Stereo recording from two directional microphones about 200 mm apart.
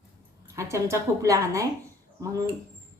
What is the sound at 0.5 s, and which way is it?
A woman's voice, 15° right (ahead or behind).